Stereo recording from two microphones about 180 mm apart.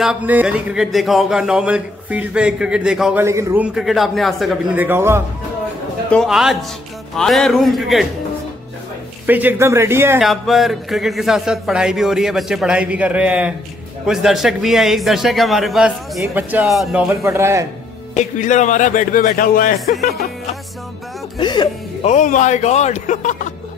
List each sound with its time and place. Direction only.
0.0 s a man's voice: 5° right (ahead or behind)
3.3 s a man's voice: 15° right (ahead or behind); by 4.8 s centre (ahead or behind)
4.8 s speech: 15° right (ahead or behind)
6.0 s a man's voice: centre (ahead or behind)
9.2 s speech: 10° right (ahead or behind)
10.2 s a man's voice: centre (ahead or behind)
18.1 s a man's voice: 40° left (ahead or behind); by 20.2 s 60° left (ahead or behind)
21.4 s music: 25° left (ahead or behind)
22.0 s a man's voice: 45° left (ahead or behind)